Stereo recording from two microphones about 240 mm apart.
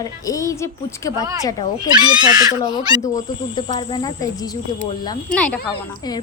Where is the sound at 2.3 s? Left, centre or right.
Centre.